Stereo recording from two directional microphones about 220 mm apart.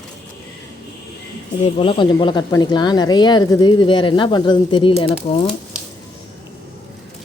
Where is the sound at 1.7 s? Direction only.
25° left (ahead or behind).